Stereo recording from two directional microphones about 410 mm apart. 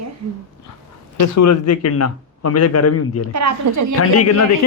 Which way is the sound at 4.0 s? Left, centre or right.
Left.